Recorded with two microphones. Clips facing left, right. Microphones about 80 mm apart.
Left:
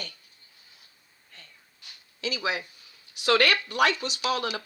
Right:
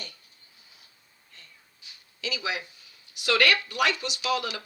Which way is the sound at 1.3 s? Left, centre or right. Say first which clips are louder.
Left 2 dB; left.